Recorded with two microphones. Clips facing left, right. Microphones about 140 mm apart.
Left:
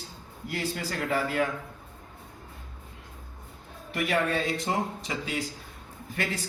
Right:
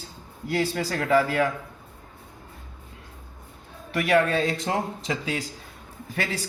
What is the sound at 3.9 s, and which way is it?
Speech, 90° right.